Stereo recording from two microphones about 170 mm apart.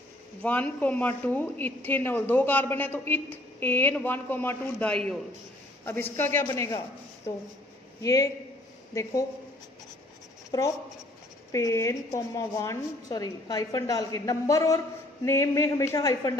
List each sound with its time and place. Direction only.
0.4 s a woman's voice: 10° left (ahead or behind)
8.0 s a woman's voice: 20° left (ahead or behind)
11.5 s a woman's voice: 20° left (ahead or behind)